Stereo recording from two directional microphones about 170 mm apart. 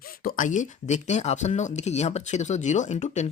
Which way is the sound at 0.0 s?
60° left (ahead or behind).